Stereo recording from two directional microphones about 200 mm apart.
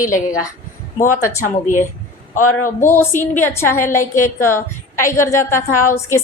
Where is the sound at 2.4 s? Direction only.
90° left.